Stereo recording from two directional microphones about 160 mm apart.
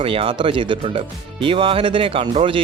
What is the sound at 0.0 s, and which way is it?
Speech, 35° right (ahead or behind).